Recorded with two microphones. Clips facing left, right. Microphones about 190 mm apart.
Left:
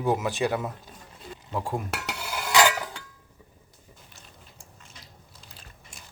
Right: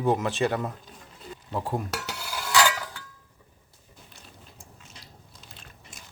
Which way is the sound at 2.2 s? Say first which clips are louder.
Left 2 dB; 20° left (ahead or behind).